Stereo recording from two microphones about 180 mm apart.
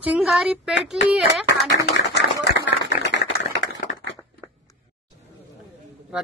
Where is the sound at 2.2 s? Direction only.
80° left.